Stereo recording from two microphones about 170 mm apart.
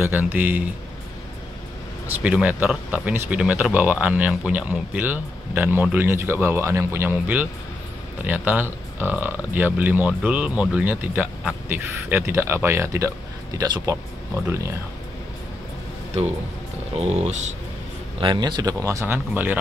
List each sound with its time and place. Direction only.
0.0 s speech: 10° right (ahead or behind)
2.2 s speech: 5° right (ahead or behind)
16.9 s speech: 40° right (ahead or behind)
18.2 s speech: 25° right (ahead or behind)